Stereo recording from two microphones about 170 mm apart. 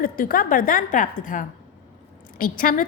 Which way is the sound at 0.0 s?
55° left (ahead or behind).